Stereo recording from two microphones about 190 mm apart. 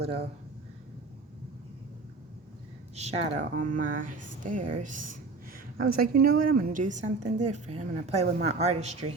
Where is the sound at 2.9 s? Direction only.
35° right (ahead or behind).